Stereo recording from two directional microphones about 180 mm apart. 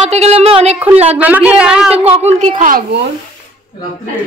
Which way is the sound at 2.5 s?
45° right (ahead or behind).